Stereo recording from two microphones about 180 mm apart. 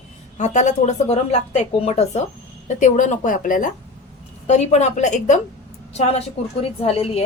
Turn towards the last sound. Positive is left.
turn(degrees=30)  # may be behind; listen again after turning